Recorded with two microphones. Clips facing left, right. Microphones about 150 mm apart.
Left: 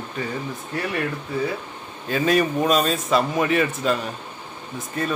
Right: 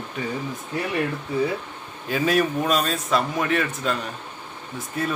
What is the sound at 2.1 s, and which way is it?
A man's voice, 5° right (ahead or behind).